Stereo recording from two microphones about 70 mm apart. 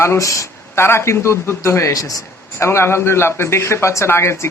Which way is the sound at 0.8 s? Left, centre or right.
Left.